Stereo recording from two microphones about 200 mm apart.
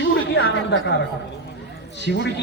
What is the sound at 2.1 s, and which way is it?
Speech, 60° left (ahead or behind).